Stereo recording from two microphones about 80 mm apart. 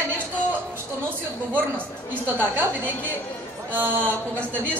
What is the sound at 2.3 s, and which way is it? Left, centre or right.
Speech, right.